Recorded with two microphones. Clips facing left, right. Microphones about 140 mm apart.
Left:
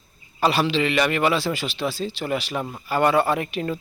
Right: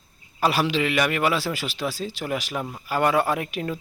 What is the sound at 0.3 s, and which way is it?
Speech, 10° right (ahead or behind).